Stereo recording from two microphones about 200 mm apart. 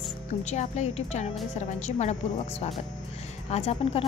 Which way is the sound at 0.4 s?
35° left (ahead or behind).